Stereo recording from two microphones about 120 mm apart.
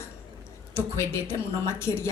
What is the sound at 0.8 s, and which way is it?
A woman's voice, 20° left (ahead or behind).